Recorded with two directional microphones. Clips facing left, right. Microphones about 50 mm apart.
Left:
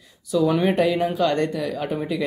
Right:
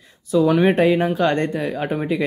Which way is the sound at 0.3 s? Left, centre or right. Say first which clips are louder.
Right 4 dB; right.